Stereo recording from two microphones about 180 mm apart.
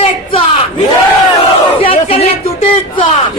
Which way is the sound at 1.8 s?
30° left (ahead or behind).